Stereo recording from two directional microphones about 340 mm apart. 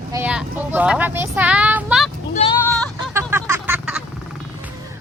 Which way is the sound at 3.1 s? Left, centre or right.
Centre.